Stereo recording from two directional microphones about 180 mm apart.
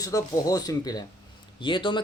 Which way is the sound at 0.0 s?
20° left (ahead or behind).